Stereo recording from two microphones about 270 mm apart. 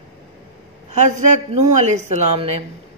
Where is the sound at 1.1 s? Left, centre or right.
Right.